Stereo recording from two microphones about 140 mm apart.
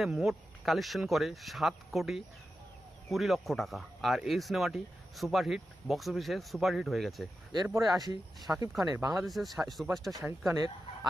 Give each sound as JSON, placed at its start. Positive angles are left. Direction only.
{"t": 0.0, "sound": "speech", "side_deg": 0}
{"t": 7.5, "sound": "speech", "side_deg": -20}
{"t": 9.2, "sound": "speech", "side_deg": 0}